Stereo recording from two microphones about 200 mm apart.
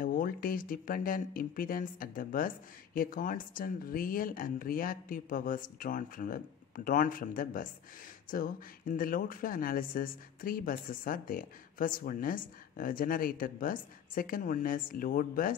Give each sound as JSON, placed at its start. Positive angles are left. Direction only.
{"t": 0.0, "sound": "speech", "side_deg": 45}